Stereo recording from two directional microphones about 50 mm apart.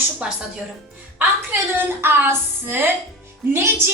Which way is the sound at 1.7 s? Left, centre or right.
Right.